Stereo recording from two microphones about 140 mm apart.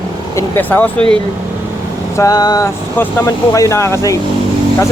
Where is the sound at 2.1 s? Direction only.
25° left (ahead or behind).